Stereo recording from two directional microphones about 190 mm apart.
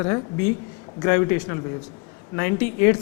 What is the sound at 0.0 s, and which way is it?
A man's voice, 20° left (ahead or behind).